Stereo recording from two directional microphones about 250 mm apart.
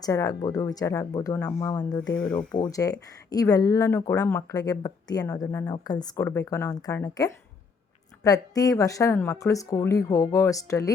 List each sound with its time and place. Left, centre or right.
0.0 s speech: centre
2.1 s speech: centre
2.5 s speech: centre